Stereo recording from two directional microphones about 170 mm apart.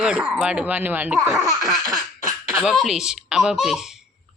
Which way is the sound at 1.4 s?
20° right (ahead or behind).